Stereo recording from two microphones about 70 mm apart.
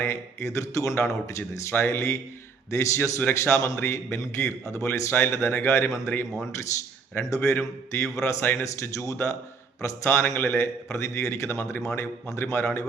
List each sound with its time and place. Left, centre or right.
0.0 s speech: left
3.2 s speech: left
7.2 s speech: left